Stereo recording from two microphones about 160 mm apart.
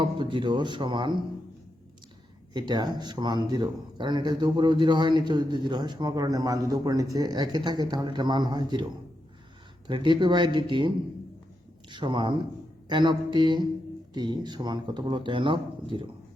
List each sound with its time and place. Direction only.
0.0 s a man's voice: 30° right (ahead or behind)
2.5 s a man's voice: 30° right (ahead or behind)